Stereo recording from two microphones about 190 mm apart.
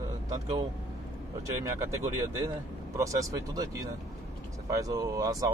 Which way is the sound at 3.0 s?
15° right (ahead or behind).